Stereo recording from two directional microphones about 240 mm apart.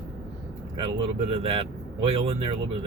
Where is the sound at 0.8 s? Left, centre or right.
Right.